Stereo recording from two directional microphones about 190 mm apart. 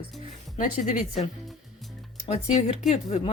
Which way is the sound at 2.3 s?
35° left (ahead or behind).